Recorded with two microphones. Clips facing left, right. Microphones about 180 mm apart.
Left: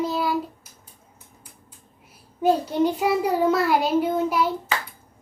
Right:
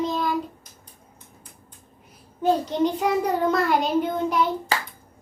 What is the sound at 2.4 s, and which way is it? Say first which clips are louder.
A child's voice: left 1 dB; 10° left (ahead or behind).